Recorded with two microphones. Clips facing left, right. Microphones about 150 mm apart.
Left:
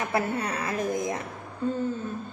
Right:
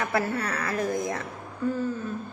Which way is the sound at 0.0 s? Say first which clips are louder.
Even; 20° left (ahead or behind).